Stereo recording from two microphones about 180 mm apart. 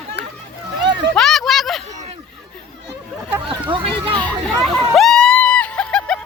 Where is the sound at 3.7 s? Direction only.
30° right (ahead or behind).